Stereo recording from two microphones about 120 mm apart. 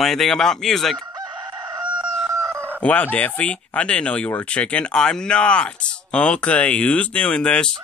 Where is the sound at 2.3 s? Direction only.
20° right (ahead or behind).